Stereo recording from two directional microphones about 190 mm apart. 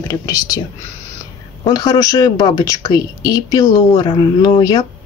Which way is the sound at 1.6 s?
20° left (ahead or behind).